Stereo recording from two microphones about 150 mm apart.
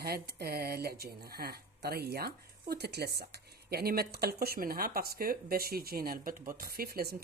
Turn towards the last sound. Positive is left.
turn(degrees=-85)